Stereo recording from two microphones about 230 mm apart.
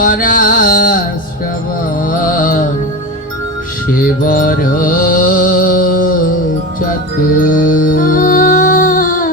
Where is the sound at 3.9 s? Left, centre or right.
Left.